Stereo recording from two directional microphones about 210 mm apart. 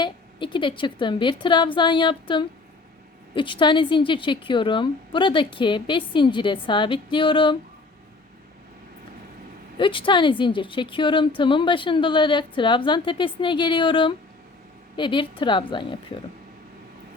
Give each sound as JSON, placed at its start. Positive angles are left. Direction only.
{"t": 0.0, "sound": "speech", "side_deg": 20}
{"t": 9.7, "sound": "speech", "side_deg": 25}